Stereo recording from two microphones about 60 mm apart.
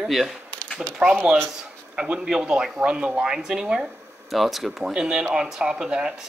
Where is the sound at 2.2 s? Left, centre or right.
Centre.